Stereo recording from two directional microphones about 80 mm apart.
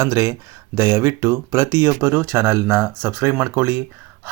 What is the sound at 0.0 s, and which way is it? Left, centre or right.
Speech, right.